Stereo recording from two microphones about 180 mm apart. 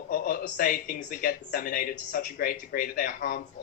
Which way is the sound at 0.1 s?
50° left (ahead or behind).